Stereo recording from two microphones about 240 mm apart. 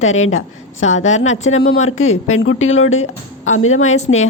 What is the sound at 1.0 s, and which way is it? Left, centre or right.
Speech, left.